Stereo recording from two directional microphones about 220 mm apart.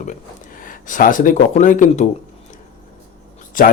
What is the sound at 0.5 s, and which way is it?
Speech, 40° left (ahead or behind).